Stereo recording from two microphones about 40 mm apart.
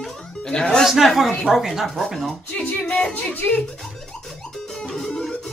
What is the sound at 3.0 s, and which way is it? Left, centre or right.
Music, centre.